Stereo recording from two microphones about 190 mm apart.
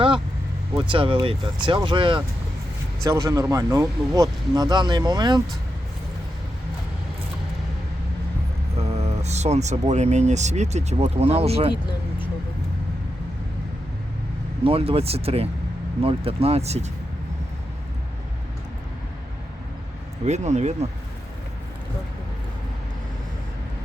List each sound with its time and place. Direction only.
0.8 s speech: 25° right (ahead or behind)
9.0 s speech: 35° right (ahead or behind)
11.7 s a sound: 25° left (ahead or behind)
14.6 s speech: 30° right (ahead or behind)
20.2 s speech: 35° right (ahead or behind)